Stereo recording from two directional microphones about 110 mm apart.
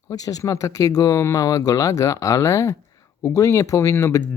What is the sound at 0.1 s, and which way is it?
Speech, 30° left (ahead or behind).